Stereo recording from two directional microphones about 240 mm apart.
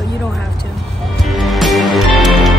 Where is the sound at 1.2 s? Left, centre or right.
Centre.